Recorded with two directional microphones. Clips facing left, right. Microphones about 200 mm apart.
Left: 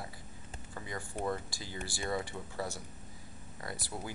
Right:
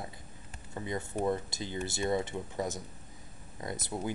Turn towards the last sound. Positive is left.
turn(degrees=-20)  # may be behind; listen again after turning